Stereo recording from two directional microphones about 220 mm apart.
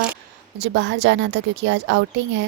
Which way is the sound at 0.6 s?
55° right (ahead or behind).